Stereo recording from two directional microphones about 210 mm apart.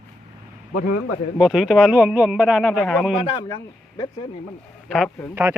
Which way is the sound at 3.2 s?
25° left (ahead or behind).